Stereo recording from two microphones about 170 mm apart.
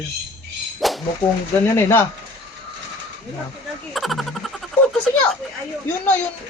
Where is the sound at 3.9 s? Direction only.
Centre (ahead or behind).